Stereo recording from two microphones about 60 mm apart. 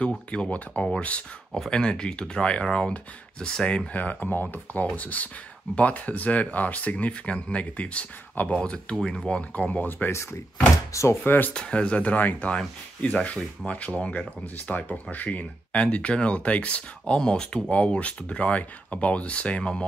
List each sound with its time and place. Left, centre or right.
0.3 s speech: centre
9.4 s speech: left
10.9 s speech: left
11.2 s speech: left
11.5 s speech: centre